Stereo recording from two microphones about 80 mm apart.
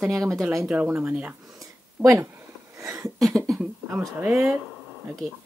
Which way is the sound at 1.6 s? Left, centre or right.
Right.